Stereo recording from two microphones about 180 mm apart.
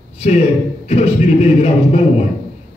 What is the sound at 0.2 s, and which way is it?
A man's voice, 35° left (ahead or behind).